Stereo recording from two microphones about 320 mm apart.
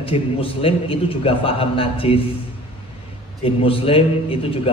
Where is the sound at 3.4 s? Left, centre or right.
Centre.